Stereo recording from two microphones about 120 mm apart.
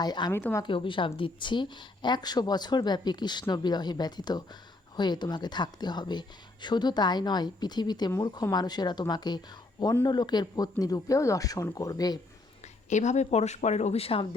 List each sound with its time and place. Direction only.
0.0 s speech: 35° left (ahead or behind)
0.3 s speech: 20° left (ahead or behind)
0.6 s speech: 45° left (ahead or behind)
12.9 s speech: 80° left; by 14.3 s 55° left (ahead or behind)